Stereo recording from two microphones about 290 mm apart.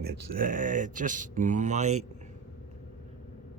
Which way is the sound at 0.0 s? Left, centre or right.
Right.